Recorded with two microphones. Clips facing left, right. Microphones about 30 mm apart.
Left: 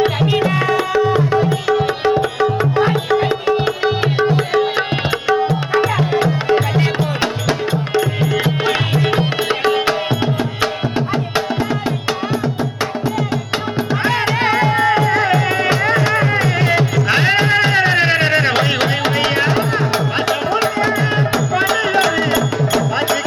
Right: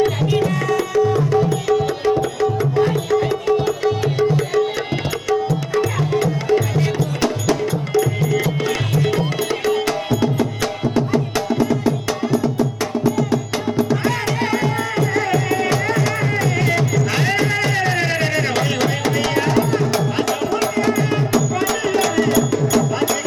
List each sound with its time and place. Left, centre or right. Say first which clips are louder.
0.0 s tabla: left 2 dB; left
5.3 s music: left 3 dB; left